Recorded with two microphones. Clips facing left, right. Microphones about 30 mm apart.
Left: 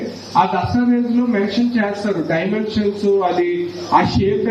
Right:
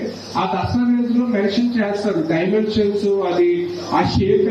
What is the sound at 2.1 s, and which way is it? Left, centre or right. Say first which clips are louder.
Speech: even; centre.